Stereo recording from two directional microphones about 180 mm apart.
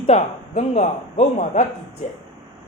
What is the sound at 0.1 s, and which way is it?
Speech, 40° left (ahead or behind).